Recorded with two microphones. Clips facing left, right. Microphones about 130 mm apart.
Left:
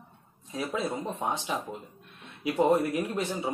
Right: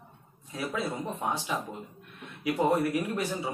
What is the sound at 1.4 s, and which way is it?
Speech, 20° left (ahead or behind).